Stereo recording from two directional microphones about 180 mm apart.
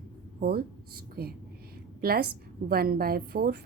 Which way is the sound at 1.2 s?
60° right (ahead or behind).